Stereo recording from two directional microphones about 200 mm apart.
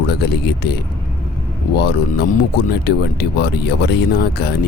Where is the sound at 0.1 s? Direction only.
55° left (ahead or behind).